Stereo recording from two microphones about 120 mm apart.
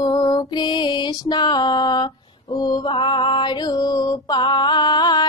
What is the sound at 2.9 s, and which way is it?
Mantra, 40° left (ahead or behind).